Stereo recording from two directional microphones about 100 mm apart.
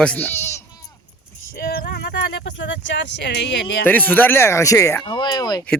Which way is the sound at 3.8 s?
20° left (ahead or behind).